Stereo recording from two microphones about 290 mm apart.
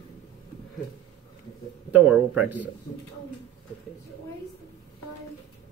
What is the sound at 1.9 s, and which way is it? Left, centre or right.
Speech, centre.